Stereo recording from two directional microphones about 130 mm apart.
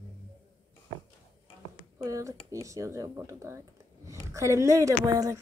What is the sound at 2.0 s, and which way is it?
Speech, 25° right (ahead or behind).